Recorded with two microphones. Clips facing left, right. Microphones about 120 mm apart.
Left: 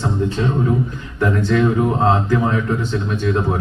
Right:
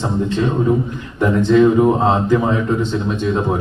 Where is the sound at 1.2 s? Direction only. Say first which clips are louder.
Right 5 dB; 20° right (ahead or behind).